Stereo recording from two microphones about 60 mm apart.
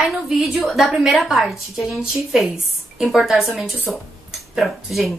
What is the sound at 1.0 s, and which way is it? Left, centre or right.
A woman's voice, centre.